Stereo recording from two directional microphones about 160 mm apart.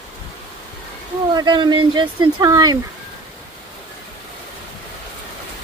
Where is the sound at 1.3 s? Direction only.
30° right (ahead or behind).